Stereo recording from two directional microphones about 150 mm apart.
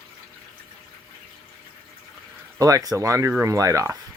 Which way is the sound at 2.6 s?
25° right (ahead or behind).